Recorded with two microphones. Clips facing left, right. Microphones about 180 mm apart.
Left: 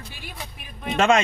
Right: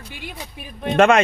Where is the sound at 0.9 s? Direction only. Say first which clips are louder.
Right 5 dB; 60° right (ahead or behind).